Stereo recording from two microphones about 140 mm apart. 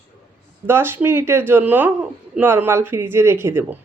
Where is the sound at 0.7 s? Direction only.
15° right (ahead or behind).